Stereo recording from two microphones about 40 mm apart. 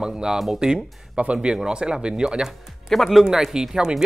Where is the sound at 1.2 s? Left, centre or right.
Right.